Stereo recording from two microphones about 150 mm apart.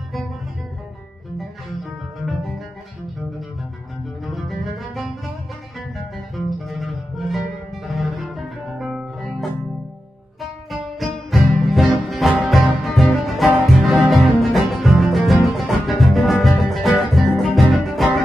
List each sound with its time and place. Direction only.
2.2 s music: centre (ahead or behind)
4.3 s music: centre (ahead or behind)
6.7 s music: centre (ahead or behind)
11.0 s music: centre (ahead or behind)